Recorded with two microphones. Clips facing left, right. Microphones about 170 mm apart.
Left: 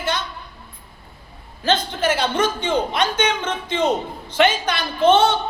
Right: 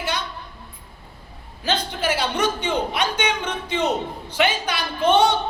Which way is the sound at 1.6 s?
10° right (ahead or behind).